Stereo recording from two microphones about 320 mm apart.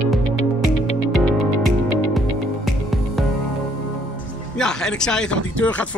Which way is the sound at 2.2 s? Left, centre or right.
Centre.